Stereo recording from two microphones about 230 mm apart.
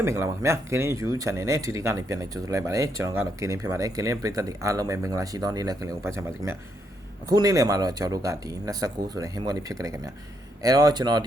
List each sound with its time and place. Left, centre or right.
0.0 s speech: centre